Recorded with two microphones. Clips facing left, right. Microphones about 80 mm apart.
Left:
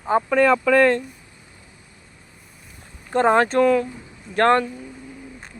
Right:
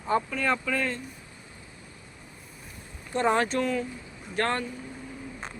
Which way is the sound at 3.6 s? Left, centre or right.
Left.